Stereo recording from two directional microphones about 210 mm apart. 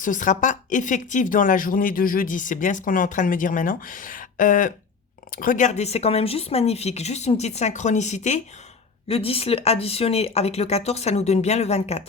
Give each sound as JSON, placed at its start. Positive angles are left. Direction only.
{"t": 0.0, "sound": "speech", "side_deg": 35}